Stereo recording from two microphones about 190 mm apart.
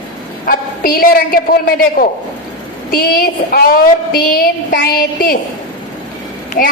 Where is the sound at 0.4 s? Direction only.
45° left (ahead or behind).